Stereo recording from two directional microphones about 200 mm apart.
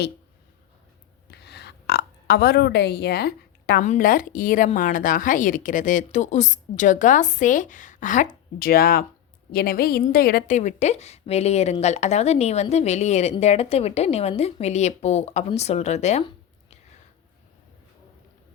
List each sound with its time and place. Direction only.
1.3 s burping: 55° left (ahead or behind)
3.8 s a woman's voice: 45° left (ahead or behind)